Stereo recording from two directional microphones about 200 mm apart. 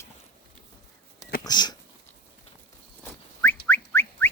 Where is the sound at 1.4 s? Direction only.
20° left (ahead or behind).